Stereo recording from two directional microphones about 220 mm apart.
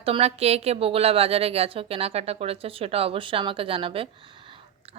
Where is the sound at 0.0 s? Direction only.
25° right (ahead or behind).